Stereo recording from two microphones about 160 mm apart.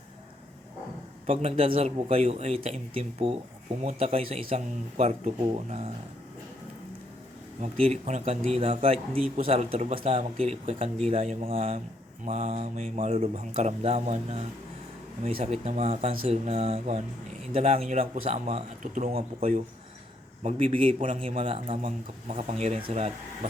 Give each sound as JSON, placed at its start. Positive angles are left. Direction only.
{"t": 1.3, "sound": "speech", "side_deg": -40}
{"t": 7.6, "sound": "speech", "side_deg": -40}
{"t": 20.4, "sound": "speech", "side_deg": -40}